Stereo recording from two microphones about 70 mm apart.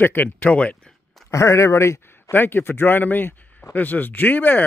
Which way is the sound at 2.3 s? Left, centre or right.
Left.